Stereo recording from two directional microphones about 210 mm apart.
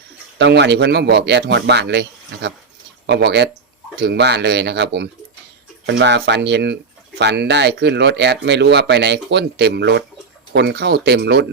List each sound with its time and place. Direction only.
0.3 s speech: 55° right (ahead or behind)